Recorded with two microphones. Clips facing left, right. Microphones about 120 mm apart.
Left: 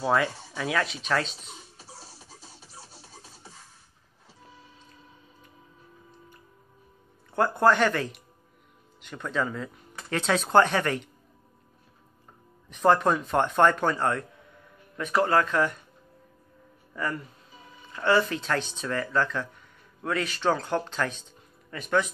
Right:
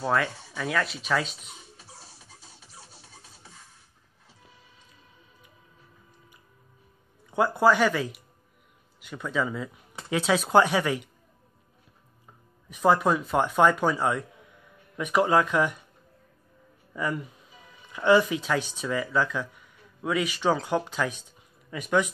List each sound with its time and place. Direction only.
0.0 s speech: centre (ahead or behind)
1.8 s music: 35° left (ahead or behind)
7.2 s speech: 10° right (ahead or behind)
12.6 s speech: 10° right (ahead or behind)
16.9 s speech: 15° right (ahead or behind)